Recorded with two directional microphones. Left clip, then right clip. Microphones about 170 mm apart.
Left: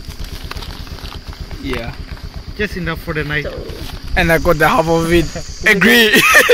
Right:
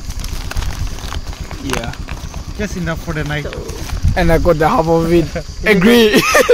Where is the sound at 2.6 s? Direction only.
45° right (ahead or behind).